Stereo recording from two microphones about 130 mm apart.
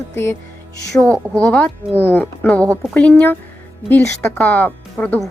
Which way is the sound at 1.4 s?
10° left (ahead or behind).